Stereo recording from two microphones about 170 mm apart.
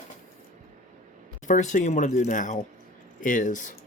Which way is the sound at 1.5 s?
45° left (ahead or behind).